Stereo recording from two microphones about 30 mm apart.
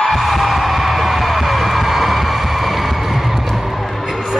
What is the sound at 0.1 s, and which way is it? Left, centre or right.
Heart sounds, centre.